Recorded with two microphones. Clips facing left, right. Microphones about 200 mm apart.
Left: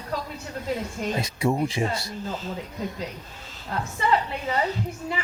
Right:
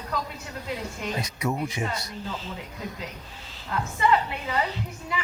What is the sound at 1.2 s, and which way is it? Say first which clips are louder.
Speech: left 5 dB; 30° left (ahead or behind).